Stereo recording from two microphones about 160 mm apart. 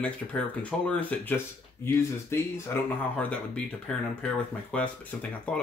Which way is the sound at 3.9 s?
5° left (ahead or behind).